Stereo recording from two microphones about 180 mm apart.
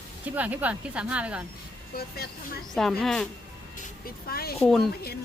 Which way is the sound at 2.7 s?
Centre (ahead or behind).